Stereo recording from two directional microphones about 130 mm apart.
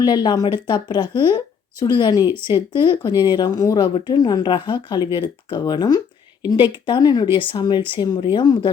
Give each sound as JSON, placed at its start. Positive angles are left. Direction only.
{"t": 0.0, "sound": "speech", "side_deg": 35}